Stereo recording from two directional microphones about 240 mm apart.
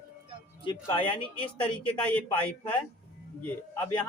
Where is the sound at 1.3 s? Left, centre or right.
Centre.